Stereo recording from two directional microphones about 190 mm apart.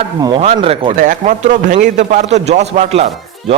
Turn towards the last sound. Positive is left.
turn(degrees=-35)  # may be behind; listen again after turning